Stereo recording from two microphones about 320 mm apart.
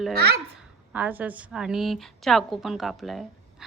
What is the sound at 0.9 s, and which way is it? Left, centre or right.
Speech, centre.